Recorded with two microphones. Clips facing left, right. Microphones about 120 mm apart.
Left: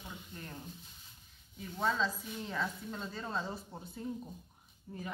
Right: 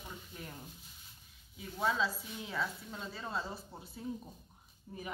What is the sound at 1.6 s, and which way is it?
A woman's voice, 5° right (ahead or behind).